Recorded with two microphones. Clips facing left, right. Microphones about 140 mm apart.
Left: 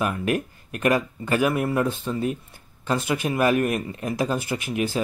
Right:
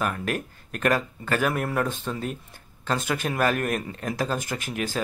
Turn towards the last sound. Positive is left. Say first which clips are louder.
# left 4 dB
turn(degrees=10)  # may be behind; listen again after turning